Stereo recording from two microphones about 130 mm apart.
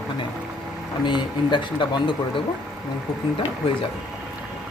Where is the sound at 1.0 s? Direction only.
40° left (ahead or behind).